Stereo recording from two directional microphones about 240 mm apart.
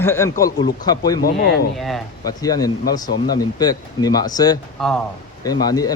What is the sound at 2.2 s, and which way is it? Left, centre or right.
A man's voice, centre.